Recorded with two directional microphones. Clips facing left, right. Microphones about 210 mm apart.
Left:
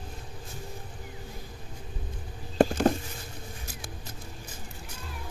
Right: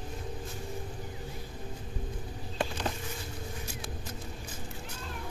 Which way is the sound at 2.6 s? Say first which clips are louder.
Left 12 dB; 45° left (ahead or behind).